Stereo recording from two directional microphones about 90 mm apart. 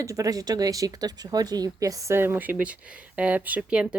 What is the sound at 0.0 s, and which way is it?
Speech, 40° right (ahead or behind).